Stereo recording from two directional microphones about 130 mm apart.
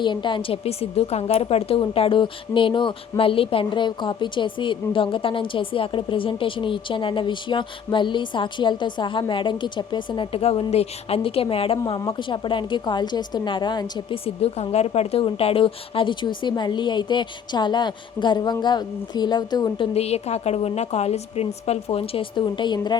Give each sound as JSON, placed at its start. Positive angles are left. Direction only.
{"t": 0.0, "sound": "a woman's voice", "side_deg": 35}
{"t": 14.3, "sound": "a woman's voice", "side_deg": 50}
{"t": 19.9, "sound": "a woman's voice", "side_deg": 55}